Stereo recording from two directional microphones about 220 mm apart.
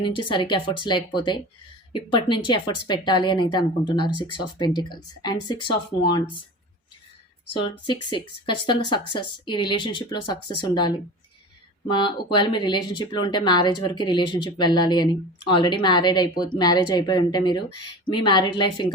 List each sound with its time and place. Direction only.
0.2 s speech: 20° left (ahead or behind)
7.5 s speech: 20° left (ahead or behind)